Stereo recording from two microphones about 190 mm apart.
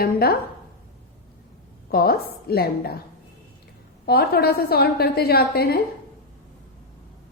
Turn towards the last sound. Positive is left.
turn(degrees=55)  # may be behind; listen again after turning